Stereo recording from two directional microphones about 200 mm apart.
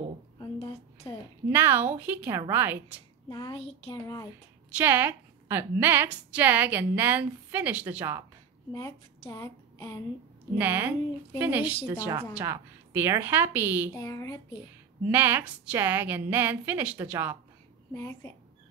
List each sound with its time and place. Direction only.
0.4 s a sound: 25° left (ahead or behind)
1.5 s a woman's voice: 10° right (ahead or behind)
3.3 s a child's voice: 20° left (ahead or behind)
4.6 s a woman's voice: 10° right (ahead or behind)
9.2 s speech: 15° left (ahead or behind)
10.6 s a woman's voice: 10° right (ahead or behind)
13.9 s a child's voice: 20° left (ahead or behind)
15.0 s a woman's voice: 10° right (ahead or behind)
17.9 s speech: 15° left (ahead or behind)